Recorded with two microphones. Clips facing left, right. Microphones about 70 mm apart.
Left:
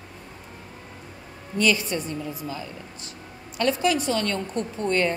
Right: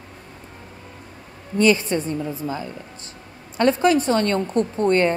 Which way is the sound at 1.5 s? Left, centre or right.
Right.